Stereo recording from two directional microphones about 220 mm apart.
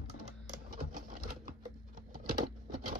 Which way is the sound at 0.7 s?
40° right (ahead or behind).